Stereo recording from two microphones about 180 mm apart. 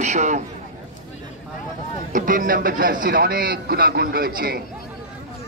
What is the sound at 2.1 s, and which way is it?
A man's voice, 50° right (ahead or behind).